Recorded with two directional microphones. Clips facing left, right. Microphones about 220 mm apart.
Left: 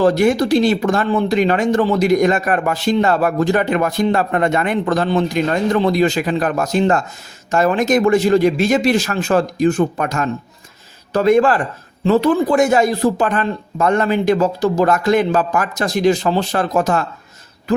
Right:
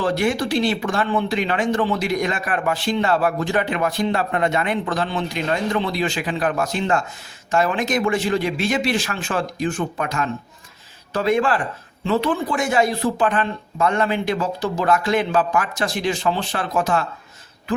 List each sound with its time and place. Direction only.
0.0 s speech: 40° left (ahead or behind)